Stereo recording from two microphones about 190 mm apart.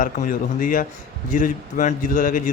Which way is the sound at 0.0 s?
45° left (ahead or behind).